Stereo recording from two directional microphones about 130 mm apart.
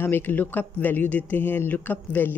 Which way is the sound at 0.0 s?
15° left (ahead or behind).